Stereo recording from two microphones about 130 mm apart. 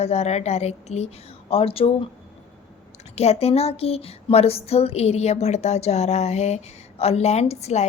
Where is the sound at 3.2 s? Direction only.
55° left (ahead or behind).